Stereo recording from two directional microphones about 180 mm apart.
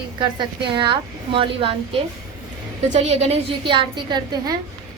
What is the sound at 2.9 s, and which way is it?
A woman's voice, 40° right (ahead or behind).